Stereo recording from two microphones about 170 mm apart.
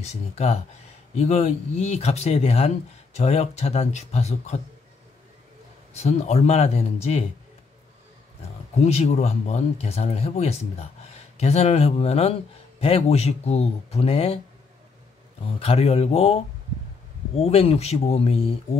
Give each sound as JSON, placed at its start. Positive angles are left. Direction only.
{"t": 0.0, "sound": "speech", "side_deg": 40}
{"t": 5.9, "sound": "speech", "side_deg": 40}
{"t": 8.7, "sound": "speech", "side_deg": 40}
{"t": 15.4, "sound": "speech", "side_deg": 35}